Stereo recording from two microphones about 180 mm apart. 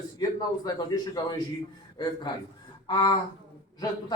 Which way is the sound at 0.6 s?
20° left (ahead or behind).